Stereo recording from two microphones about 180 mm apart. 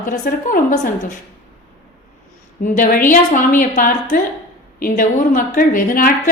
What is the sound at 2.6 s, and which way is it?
A woman's voice, 50° left (ahead or behind).